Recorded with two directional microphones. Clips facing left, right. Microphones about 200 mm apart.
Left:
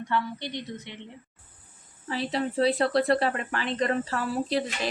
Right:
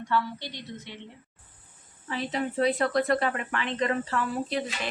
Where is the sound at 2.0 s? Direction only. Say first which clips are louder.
Left 2 dB; 35° left (ahead or behind).